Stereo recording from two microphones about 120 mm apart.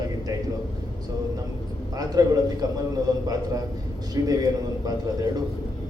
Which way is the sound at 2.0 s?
30° right (ahead or behind).